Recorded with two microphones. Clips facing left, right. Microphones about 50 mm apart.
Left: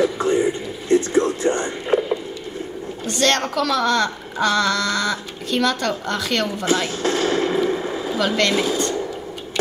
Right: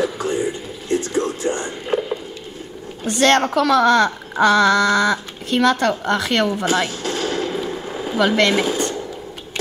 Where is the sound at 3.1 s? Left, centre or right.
Right.